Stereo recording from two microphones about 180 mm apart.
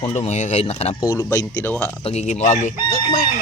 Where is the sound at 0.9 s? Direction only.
20° left (ahead or behind).